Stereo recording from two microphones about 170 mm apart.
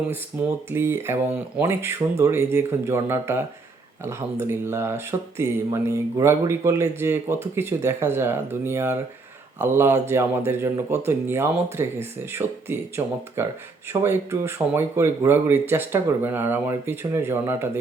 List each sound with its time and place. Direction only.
0.1 s speech: 15° right (ahead or behind)